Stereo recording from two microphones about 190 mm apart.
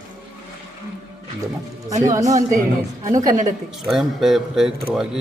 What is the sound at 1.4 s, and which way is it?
Speech, 20° right (ahead or behind).